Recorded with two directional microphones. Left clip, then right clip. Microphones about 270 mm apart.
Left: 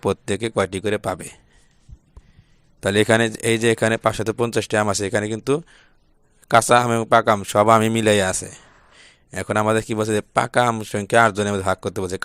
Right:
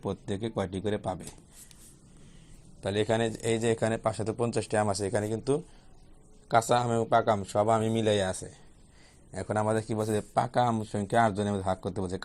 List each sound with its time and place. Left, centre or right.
0.0 s speech: left
2.8 s a man's voice: left
7.0 s speech: left
9.3 s a man's voice: left
10.7 s speech: left
11.1 s a man's voice: left